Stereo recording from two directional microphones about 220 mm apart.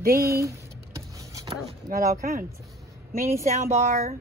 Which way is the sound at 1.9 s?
40° right (ahead or behind).